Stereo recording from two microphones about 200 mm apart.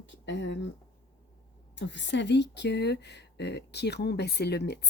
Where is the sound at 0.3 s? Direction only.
65° left (ahead or behind).